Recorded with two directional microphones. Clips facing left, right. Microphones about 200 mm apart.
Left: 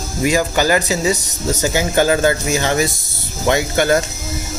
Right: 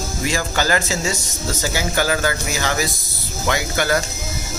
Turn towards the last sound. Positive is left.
turn(degrees=25)  # may be behind; listen again after turning